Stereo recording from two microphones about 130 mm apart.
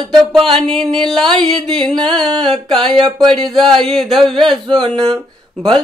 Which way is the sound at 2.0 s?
35° right (ahead or behind).